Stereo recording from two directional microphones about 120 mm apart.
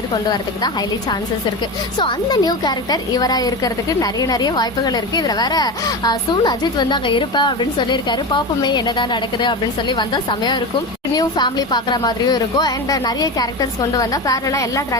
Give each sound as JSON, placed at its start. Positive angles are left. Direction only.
{"t": 0.1, "sound": "a woman's voice", "side_deg": 35}
{"t": 2.0, "sound": "a woman's voice", "side_deg": 40}